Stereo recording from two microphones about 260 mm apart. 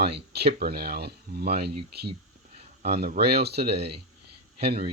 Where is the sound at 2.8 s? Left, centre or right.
Right.